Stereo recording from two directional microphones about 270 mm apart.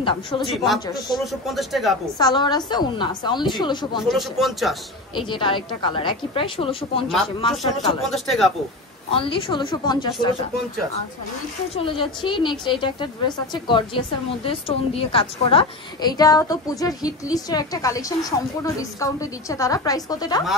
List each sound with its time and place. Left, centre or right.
0.0 s a woman's voice: centre
1.2 s speech: centre
2.1 s a woman's voice: centre
4.1 s speech: centre
5.1 s a woman's voice: centre
8.0 s speech: centre
9.1 s speech: centre
11.7 s a woman's voice: centre